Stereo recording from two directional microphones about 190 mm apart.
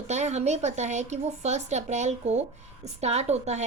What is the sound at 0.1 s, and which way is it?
A woman's voice, 35° right (ahead or behind).